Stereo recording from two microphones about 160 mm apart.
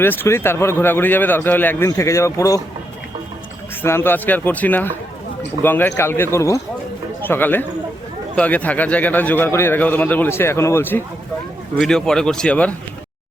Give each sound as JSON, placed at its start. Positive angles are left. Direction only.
{"t": 0.0, "sound": "a man's voice", "side_deg": 15}
{"t": 3.8, "sound": "a man's voice", "side_deg": 15}
{"t": 11.8, "sound": "speech", "side_deg": 5}